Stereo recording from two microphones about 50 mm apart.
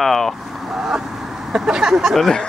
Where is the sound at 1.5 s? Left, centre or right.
Centre.